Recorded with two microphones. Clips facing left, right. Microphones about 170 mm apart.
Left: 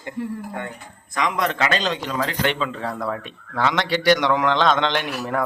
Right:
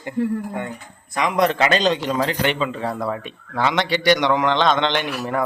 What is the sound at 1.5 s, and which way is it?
Speech, 25° right (ahead or behind).